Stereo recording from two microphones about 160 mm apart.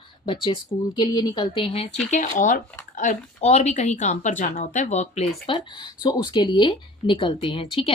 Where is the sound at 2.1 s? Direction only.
55° left (ahead or behind).